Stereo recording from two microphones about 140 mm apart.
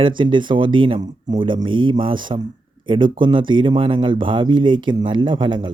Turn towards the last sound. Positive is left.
turn(degrees=-35)  # may be behind; listen again after turning